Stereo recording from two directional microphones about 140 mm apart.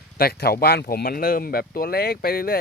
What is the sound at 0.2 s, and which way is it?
Speech, 90° left.